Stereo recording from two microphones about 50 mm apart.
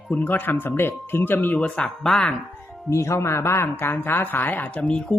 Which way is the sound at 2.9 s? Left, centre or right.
Left.